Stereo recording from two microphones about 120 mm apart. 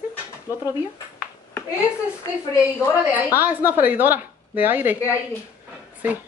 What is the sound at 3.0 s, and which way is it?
Speech, 15° right (ahead or behind).